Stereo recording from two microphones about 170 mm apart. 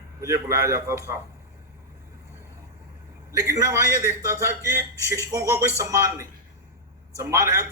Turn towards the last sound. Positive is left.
turn(degrees=-15)  # may be behind; listen again after turning